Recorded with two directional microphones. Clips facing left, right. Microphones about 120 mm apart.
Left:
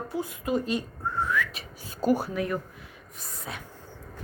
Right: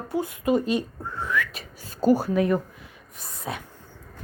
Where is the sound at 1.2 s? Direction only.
90° right.